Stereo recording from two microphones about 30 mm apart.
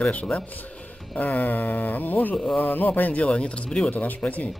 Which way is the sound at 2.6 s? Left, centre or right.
Left.